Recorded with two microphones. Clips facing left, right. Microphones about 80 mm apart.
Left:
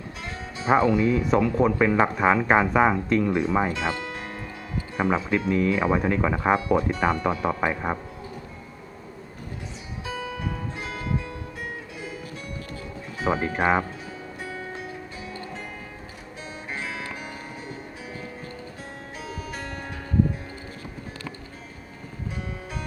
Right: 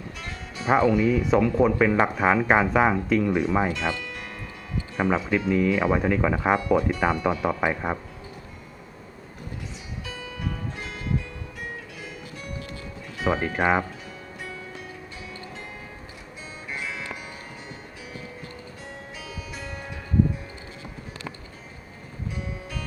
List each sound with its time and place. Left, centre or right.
0.7 s speech: centre
3.8 s music: left
4.9 s speech: centre
5.7 s speech: centre
6.6 s speech: centre
6.8 s speech: centre
13.2 s speech: centre
19.3 s music: left